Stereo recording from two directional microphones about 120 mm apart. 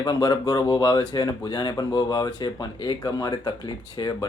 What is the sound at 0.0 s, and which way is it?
Speech, 35° left (ahead or behind).